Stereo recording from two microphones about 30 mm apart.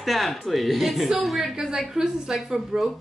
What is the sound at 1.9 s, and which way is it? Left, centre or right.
Speech, centre.